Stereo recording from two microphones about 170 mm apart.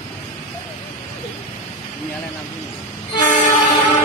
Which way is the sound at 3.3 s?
45° left (ahead or behind).